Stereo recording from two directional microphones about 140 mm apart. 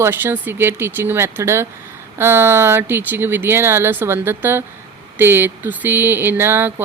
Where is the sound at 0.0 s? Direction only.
15° right (ahead or behind).